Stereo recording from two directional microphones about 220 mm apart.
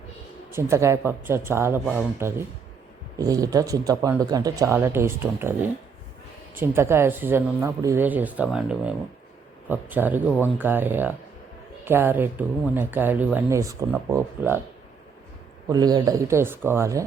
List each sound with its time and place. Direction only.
0.5 s speech: 10° right (ahead or behind)
15.7 s speech: 15° right (ahead or behind)